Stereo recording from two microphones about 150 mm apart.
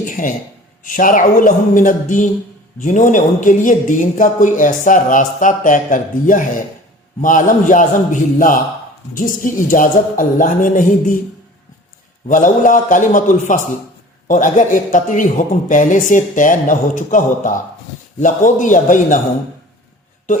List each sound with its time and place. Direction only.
0.9 s speech: 60° left (ahead or behind)
12.3 s speech: 60° left (ahead or behind)